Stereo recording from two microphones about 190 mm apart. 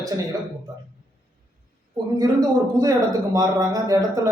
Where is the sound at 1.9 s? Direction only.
20° right (ahead or behind).